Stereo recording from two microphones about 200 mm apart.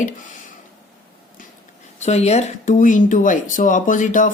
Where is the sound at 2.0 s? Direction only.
35° left (ahead or behind).